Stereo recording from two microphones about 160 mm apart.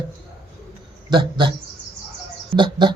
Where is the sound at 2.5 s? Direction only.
30° right (ahead or behind).